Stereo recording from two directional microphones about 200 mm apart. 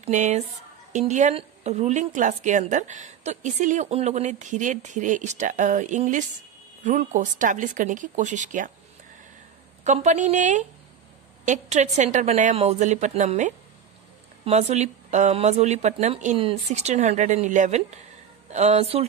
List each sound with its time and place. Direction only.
0.0 s a woman's voice: 35° right (ahead or behind)
9.8 s a woman's voice: 35° right (ahead or behind)